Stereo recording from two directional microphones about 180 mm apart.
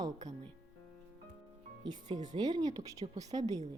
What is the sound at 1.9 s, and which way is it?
A woman's voice, 20° right (ahead or behind).